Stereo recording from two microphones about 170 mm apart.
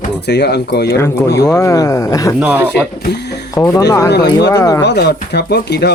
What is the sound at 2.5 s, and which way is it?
Speech, 10° right (ahead or behind).